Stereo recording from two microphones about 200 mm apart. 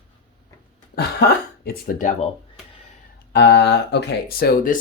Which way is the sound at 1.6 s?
45° left (ahead or behind).